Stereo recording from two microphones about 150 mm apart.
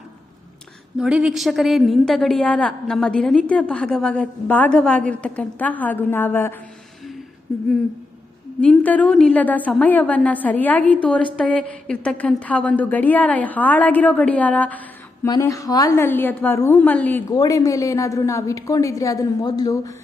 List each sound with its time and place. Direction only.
0.9 s a woman's voice: 5° right (ahead or behind); by 6.6 s 15° left (ahead or behind)
8.6 s a woman's voice: 10° left (ahead or behind)
15.3 s a woman's voice: 20° left (ahead or behind)
16.0 s a woman's voice: 15° left (ahead or behind)
17.3 s a woman's voice: 25° left (ahead or behind)